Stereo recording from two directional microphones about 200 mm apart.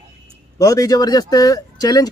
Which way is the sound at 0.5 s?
15° left (ahead or behind).